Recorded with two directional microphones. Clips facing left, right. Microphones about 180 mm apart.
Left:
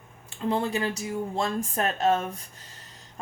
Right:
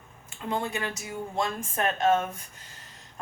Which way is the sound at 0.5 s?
35° left (ahead or behind).